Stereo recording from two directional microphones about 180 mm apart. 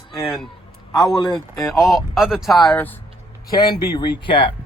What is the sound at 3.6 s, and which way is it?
Speech, 25° left (ahead or behind).